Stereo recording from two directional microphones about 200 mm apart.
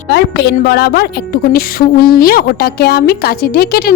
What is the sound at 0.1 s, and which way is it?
A woman's voice, 55° left (ahead or behind).